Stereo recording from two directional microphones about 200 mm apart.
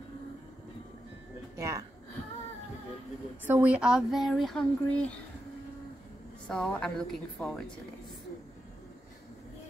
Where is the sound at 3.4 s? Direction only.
10° right (ahead or behind).